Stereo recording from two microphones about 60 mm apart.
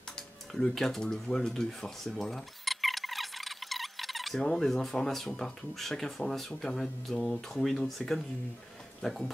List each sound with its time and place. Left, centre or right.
0.5 s speech: centre